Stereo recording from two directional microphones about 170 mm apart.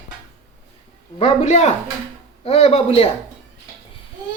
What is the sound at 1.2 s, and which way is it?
Speech, 40° left (ahead or behind).